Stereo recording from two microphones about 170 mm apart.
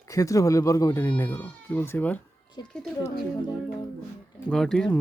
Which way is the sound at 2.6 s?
25° left (ahead or behind).